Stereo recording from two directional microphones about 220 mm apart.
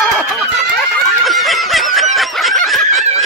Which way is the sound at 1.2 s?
Centre (ahead or behind).